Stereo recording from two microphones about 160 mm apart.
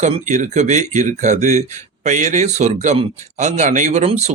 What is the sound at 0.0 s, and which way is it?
A man's voice, 45° right (ahead or behind).